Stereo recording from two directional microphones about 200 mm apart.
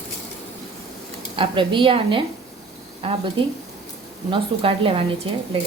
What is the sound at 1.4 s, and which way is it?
A woman's voice, 25° right (ahead or behind).